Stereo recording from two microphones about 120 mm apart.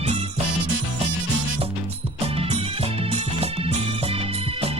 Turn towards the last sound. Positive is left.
turn(degrees=-55)  # may be behind; listen again after turning